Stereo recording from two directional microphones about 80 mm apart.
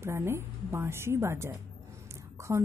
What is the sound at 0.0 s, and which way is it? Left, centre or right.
A woman's voice, right.